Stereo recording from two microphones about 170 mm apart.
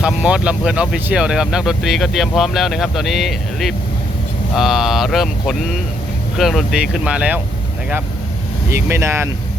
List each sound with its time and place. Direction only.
0.0 s speech: 5° right (ahead or behind)
8.7 s speech: 15° right (ahead or behind)